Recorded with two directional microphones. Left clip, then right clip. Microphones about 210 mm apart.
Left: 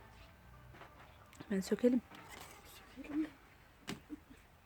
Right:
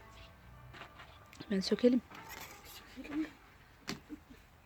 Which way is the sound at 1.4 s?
Centre (ahead or behind).